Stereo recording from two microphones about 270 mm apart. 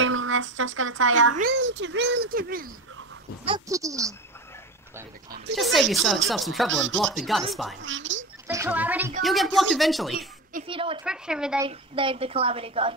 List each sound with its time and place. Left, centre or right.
0.0 s a child's voice: right
3.4 s speech: centre
5.6 s speech: centre
6.7 s speech: right
7.0 s speech: centre
7.8 s speech: right
8.5 s speech: centre
10.7 s a woman's voice: centre
11.1 s speech: centre
11.6 s a woman's voice: centre